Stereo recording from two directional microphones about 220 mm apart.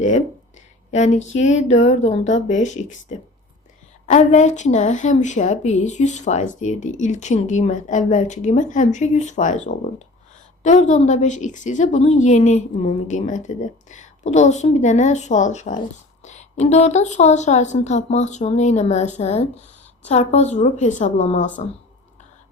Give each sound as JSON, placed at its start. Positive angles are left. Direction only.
{"t": 0.9, "sound": "speech", "side_deg": 30}